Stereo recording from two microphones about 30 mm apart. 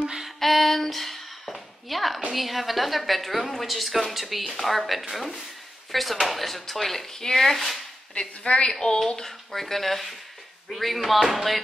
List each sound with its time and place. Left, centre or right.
0.4 s a sound: centre
2.3 s a woman's voice: centre
7.1 s speech: centre
8.1 s a woman's voice: left
8.7 s speech: left
9.5 s a woman's voice: centre